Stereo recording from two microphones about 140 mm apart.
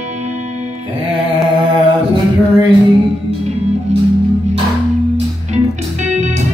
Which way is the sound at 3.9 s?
50° right (ahead or behind).